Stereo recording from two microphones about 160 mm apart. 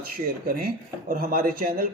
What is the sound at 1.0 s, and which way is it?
Speech, 65° right (ahead or behind).